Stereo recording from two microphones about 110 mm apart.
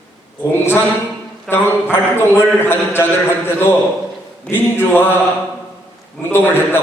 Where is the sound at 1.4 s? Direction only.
20° left (ahead or behind).